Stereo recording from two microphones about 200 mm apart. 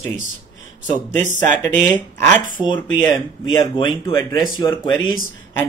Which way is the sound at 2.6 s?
20° left (ahead or behind).